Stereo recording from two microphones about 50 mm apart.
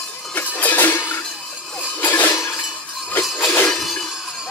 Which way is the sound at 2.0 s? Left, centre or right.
Left.